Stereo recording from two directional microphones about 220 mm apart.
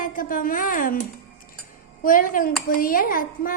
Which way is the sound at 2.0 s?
40° left (ahead or behind).